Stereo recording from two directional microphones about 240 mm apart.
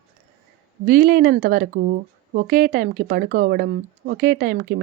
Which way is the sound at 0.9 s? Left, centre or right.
Right.